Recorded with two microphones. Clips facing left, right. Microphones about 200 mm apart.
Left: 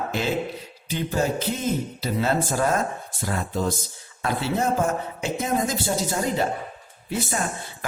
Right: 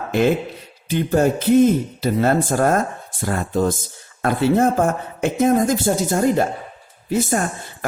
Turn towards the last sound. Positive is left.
turn(degrees=-45)  # may be behind; listen again after turning